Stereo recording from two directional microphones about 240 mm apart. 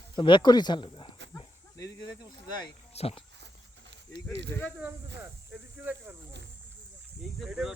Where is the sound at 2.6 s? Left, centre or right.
Left.